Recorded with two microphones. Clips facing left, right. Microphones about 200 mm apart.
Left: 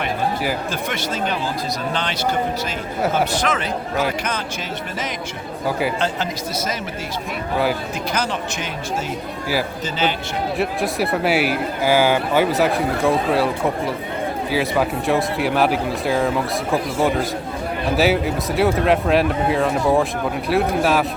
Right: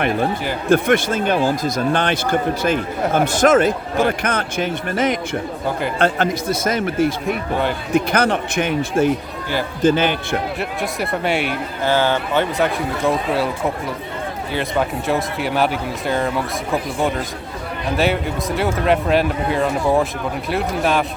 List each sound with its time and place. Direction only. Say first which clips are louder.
0.7 s speech: right 10 dB; 50° right (ahead or behind)
3.3 s a man's voice: right 8 dB; 50° right (ahead or behind)
10.6 s speech: left 3 dB; centre (ahead or behind)